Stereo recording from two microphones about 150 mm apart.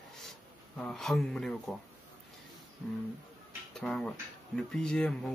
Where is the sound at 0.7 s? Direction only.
5° left (ahead or behind).